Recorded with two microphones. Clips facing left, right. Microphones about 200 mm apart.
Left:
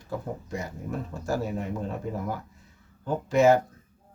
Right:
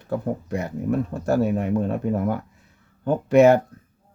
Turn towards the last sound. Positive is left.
turn(degrees=-65)  # may be behind; listen again after turning